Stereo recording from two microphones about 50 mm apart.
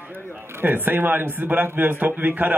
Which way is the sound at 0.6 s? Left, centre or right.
Right.